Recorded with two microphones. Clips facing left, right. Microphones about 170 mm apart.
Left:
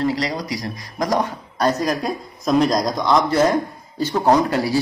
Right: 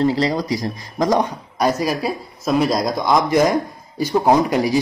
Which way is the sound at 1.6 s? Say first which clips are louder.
Right 1 dB; 10° right (ahead or behind).